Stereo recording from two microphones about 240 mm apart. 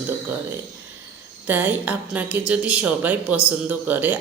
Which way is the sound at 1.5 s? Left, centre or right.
Centre.